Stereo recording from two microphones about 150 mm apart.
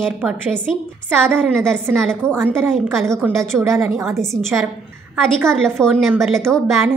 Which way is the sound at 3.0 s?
20° right (ahead or behind).